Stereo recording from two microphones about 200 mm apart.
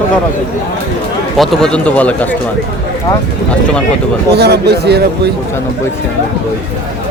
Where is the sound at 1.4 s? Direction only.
5° left (ahead or behind).